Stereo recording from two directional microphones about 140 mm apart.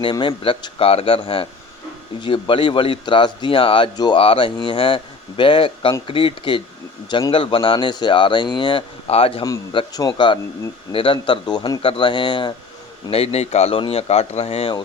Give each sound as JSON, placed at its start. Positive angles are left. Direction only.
{"t": 0.0, "sound": "speech", "side_deg": 35}
{"t": 9.4, "sound": "speech", "side_deg": 30}